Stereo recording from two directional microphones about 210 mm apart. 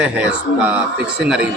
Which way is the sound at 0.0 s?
5° right (ahead or behind).